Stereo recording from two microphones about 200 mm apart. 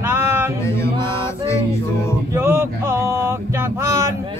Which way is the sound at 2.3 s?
15° right (ahead or behind).